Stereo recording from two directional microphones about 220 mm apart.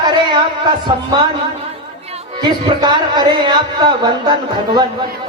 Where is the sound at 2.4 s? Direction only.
20° right (ahead or behind).